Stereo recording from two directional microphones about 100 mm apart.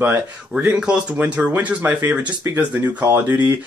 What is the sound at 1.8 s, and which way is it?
Speech, 20° right (ahead or behind).